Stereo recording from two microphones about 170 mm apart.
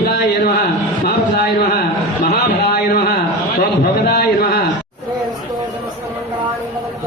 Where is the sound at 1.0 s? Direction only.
70° left (ahead or behind).